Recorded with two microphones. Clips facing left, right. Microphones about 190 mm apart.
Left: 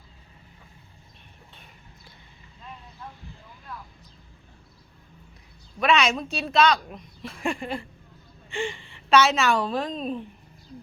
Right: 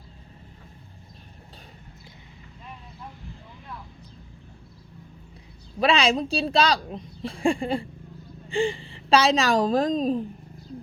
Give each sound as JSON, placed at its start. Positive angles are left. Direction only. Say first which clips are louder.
{"t": 5.8, "sound": "speech", "louder": "right 1 dB", "side_deg": -30}